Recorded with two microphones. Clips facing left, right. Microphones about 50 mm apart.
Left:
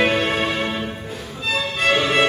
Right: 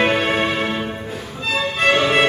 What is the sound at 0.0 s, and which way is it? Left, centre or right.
Music, centre.